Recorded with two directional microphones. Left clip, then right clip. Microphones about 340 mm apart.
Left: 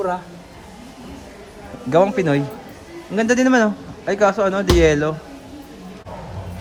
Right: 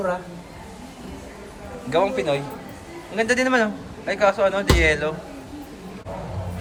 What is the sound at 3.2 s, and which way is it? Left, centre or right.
Speech, centre.